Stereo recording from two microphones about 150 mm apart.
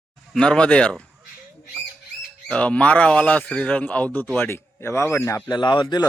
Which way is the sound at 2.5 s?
5° left (ahead or behind).